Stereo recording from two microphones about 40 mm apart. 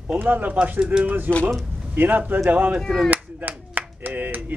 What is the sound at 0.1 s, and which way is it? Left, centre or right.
Speech, right.